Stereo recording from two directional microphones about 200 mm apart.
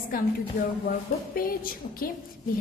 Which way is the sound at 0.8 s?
45° left (ahead or behind).